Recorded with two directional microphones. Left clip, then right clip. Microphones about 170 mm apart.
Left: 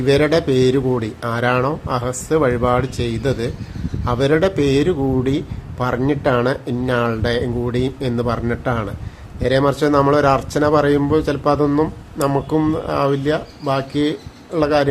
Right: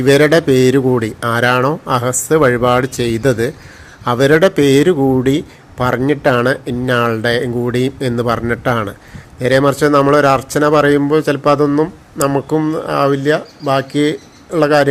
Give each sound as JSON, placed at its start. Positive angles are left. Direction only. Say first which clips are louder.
{"t": 0.0, "sound": "speech", "louder": "right 5 dB", "side_deg": -20}